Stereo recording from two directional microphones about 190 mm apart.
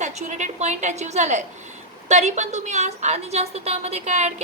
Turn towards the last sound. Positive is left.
turn(degrees=-35)  # may be behind; listen again after turning